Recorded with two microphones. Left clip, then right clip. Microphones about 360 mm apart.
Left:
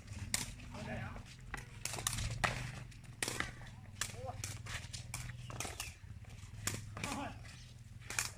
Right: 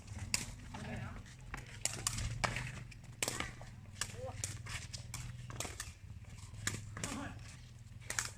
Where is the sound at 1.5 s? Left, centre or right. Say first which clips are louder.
Right 1 dB; centre.